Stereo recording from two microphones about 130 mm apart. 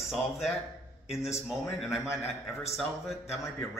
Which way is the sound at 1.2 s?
5° right (ahead or behind).